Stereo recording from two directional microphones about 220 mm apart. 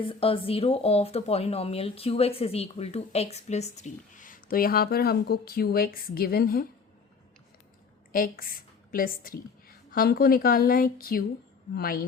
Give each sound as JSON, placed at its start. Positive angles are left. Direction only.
{"t": 0.0, "sound": "speech", "side_deg": 25}
{"t": 8.1, "sound": "a woman's voice", "side_deg": 40}